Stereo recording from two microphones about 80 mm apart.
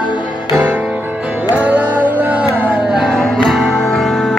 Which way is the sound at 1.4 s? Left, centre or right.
Centre.